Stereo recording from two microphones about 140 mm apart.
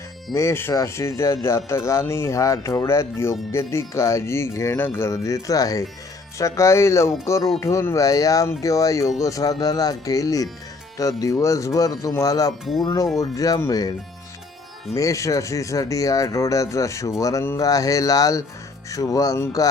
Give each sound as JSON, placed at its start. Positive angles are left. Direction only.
{"t": 0.3, "sound": "speech", "side_deg": 20}
{"t": 14.9, "sound": "speech", "side_deg": 25}